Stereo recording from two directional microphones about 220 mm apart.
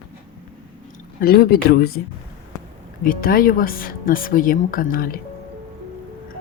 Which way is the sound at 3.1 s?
40° left (ahead or behind).